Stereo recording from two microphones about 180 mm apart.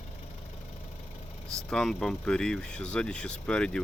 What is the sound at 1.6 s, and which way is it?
Speech, 5° left (ahead or behind).